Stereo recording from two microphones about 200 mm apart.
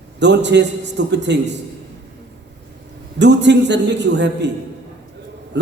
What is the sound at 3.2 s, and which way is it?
A man's voice, 60° right (ahead or behind).